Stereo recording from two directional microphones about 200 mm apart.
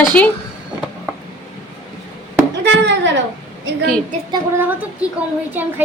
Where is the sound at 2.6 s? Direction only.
60° right (ahead or behind).